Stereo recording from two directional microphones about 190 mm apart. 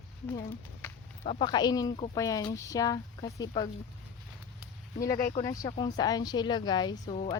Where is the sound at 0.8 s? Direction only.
15° left (ahead or behind).